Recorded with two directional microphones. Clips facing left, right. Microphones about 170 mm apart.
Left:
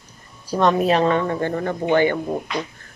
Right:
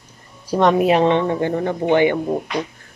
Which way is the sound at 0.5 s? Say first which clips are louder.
Right 3 dB; 20° right (ahead or behind).